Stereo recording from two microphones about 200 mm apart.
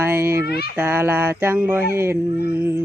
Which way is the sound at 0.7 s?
10° right (ahead or behind).